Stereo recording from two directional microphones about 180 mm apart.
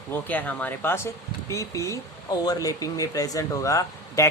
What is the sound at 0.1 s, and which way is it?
Speech, 10° left (ahead or behind).